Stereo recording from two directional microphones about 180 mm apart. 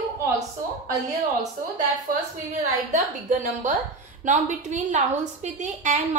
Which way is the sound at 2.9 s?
45° right (ahead or behind).